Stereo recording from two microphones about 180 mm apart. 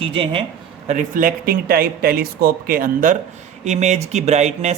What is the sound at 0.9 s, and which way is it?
Speech, 45° right (ahead or behind).